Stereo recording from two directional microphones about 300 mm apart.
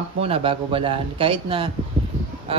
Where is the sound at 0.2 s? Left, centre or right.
Centre.